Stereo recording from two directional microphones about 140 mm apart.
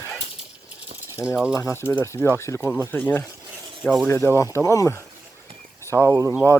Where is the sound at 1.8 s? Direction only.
15° left (ahead or behind).